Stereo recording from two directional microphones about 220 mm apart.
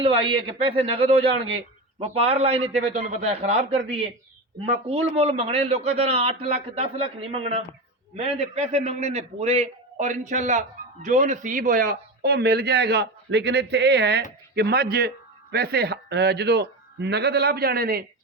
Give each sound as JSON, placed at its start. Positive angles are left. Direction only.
{"t": 0.0, "sound": "speech", "side_deg": -25}
{"t": 5.1, "sound": "a man's voice", "side_deg": -25}